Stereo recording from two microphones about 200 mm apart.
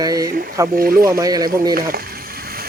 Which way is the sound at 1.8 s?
50° right (ahead or behind).